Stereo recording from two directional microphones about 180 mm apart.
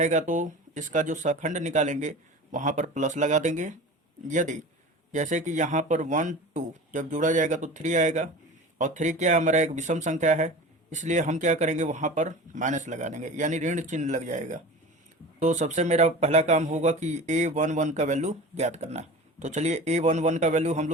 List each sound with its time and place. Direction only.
0.0 s speech: 40° right (ahead or behind)